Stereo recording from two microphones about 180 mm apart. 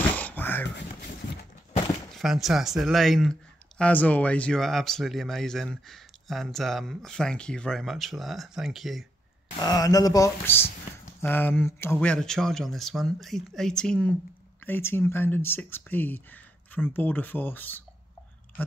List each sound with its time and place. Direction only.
0.1 s a sound: 10° left (ahead or behind)
2.1 s speech: centre (ahead or behind)
9.6 s speech: 20° left (ahead or behind)